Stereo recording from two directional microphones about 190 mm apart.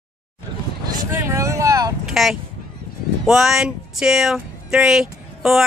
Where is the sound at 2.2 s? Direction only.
Centre (ahead or behind).